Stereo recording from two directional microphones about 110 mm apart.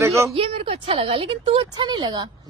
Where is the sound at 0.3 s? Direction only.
60° right (ahead or behind).